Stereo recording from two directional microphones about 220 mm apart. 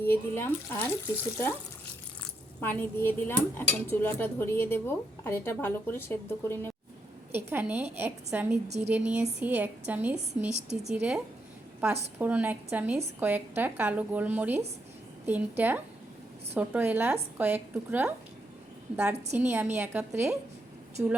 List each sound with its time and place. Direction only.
0.0 s a woman's voice: 10° left (ahead or behind)
2.6 s a woman's voice: 10° left (ahead or behind)
7.3 s a woman's voice: 10° right (ahead or behind)
8.6 s speech: 30° right (ahead or behind)
8.9 s a woman's voice: 5° right (ahead or behind)